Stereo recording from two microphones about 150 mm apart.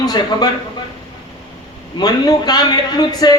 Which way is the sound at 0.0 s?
25° left (ahead or behind).